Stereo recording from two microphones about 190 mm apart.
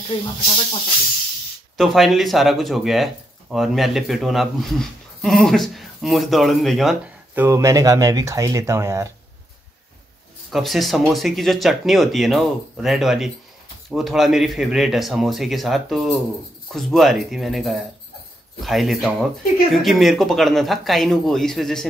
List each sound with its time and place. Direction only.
0.1 s speech: 25° left (ahead or behind)
1.8 s speech: centre (ahead or behind)
7.4 s speech: 15° right (ahead or behind)
10.5 s speech: centre (ahead or behind)